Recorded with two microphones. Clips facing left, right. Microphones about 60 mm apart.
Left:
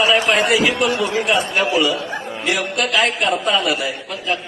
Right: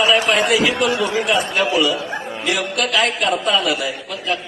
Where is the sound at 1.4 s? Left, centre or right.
Left.